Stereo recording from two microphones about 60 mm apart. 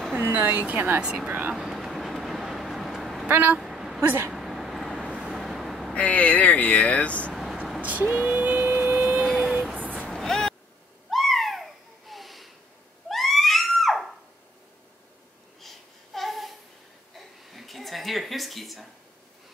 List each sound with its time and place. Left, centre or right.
0.1 s speech: right
1.0 s speech: centre
1.5 s vehicle: centre
3.3 s speech: right
3.5 s vehicle: centre
4.0 s speech: right
4.3 s vehicle: centre
5.9 s speech: left
7.8 s a sound: right
9.2 s a sound: centre
10.0 s vehicle: centre
11.1 s a sound: centre
15.6 s babbling: centre
17.5 s a sound: centre